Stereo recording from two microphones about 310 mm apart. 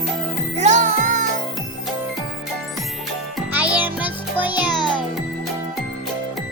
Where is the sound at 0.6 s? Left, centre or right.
Right.